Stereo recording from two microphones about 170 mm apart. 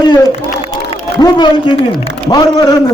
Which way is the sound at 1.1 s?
25° left (ahead or behind).